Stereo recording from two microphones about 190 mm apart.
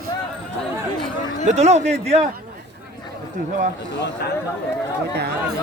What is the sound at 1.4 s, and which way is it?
Speech, 35° right (ahead or behind).